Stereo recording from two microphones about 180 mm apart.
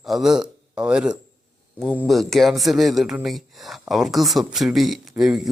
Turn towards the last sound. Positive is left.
turn(degrees=0)  # may be behind; listen again after turning